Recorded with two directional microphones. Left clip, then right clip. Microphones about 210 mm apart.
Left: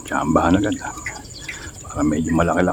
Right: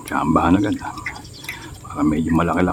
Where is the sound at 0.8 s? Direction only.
5° left (ahead or behind).